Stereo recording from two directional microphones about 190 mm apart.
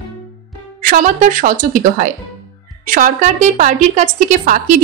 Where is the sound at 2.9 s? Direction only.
45° right (ahead or behind).